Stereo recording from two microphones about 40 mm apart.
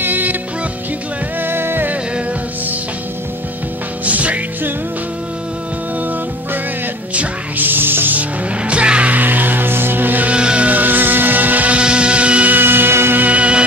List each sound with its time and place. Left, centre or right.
0.0 s music: right
1.4 s music: right
4.0 s music: right
7.5 s music: right
8.1 s music: right
9.1 s music: right
10.2 s music: right
10.7 s music: right
11.7 s music: right
12.4 s music: right
13.2 s music: right